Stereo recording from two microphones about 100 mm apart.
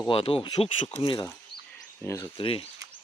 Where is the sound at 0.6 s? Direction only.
70° left (ahead or behind).